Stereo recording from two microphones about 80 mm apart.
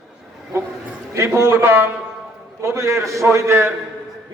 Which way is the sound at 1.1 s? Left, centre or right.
Right.